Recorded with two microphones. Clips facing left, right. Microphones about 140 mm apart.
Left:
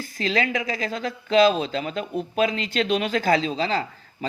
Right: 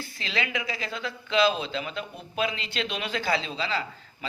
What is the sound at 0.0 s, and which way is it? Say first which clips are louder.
Speech: left 8 dB; 45° left (ahead or behind).